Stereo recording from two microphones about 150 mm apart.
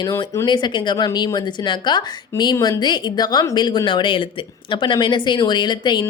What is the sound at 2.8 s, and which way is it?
Speech, 30° left (ahead or behind).